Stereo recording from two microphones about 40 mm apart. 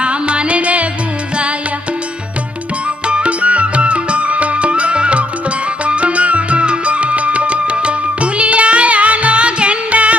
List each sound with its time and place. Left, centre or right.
0.0 s music: right
3.1 s music: right